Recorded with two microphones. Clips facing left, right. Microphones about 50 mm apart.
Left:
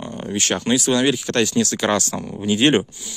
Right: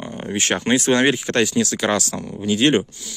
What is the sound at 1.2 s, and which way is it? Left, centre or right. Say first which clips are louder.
Speech: right 1 dB; right.